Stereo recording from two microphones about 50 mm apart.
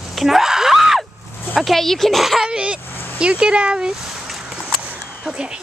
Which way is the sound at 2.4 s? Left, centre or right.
Right.